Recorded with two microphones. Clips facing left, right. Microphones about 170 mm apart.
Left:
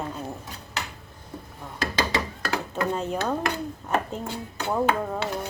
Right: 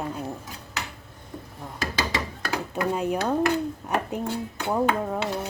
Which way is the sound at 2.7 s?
10° right (ahead or behind).